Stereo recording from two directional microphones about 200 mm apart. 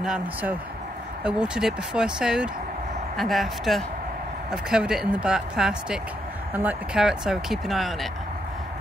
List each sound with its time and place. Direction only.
0.0 s speech: 5° right (ahead or behind)